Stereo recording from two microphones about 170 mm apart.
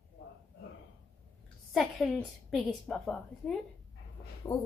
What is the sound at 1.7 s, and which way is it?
A woman's voice, centre (ahead or behind).